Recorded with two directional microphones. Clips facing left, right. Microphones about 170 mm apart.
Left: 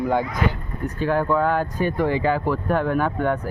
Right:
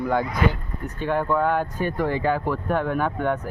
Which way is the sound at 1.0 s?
5° left (ahead or behind).